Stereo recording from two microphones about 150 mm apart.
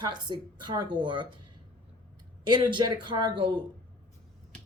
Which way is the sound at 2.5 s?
30° right (ahead or behind).